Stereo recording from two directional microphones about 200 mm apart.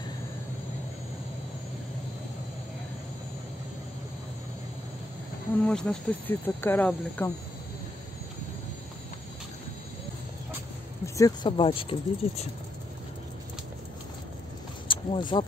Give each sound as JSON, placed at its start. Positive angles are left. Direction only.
{"t": 5.6, "sound": "speech", "side_deg": 5}
{"t": 11.1, "sound": "speech", "side_deg": 20}
{"t": 14.9, "sound": "speech", "side_deg": 25}